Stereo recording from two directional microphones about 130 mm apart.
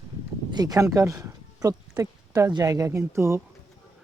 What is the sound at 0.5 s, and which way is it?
Speech, 30° right (ahead or behind).